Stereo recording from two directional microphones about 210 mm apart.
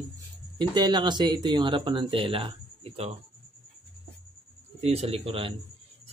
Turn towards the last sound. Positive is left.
turn(degrees=-25)  # may be behind; listen again after turning